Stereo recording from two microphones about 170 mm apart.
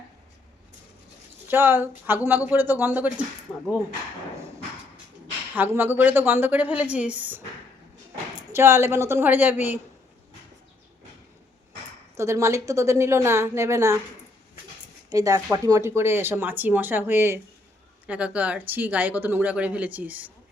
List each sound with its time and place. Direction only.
1.5 s speech: 10° right (ahead or behind)
3.5 s speech: 15° left (ahead or behind)
5.5 s speech: 10° right (ahead or behind)
8.5 s speech: 15° right (ahead or behind)
12.1 s speech: 15° right (ahead or behind)
15.1 s speech: 20° right (ahead or behind)